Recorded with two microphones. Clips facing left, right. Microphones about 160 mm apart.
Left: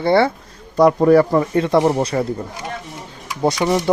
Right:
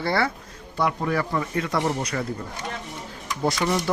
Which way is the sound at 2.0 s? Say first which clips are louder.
Left 9 dB; 30° left (ahead or behind).